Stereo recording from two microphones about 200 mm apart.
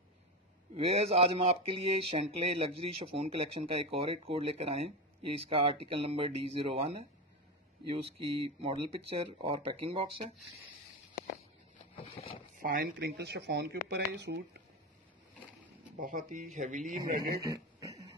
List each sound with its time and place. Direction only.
0.7 s speech: 30° right (ahead or behind)
11.9 s vehicle: 30° left (ahead or behind)
12.5 s speech: 45° right (ahead or behind)
16.0 s a man's voice: 40° right (ahead or behind)
17.4 s a sound: 20° right (ahead or behind)